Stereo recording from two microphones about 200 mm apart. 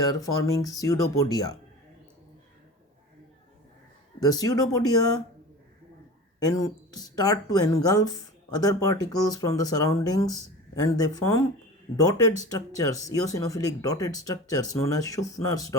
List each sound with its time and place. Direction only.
0.2 s speech: 15° left (ahead or behind)
4.2 s speech: 20° left (ahead or behind)
6.4 s speech: 20° left (ahead or behind)